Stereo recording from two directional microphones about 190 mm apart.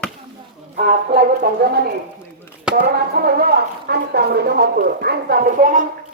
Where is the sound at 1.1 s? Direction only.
55° right (ahead or behind).